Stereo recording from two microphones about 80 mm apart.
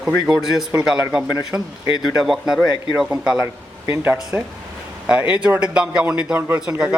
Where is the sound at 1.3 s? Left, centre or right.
Left.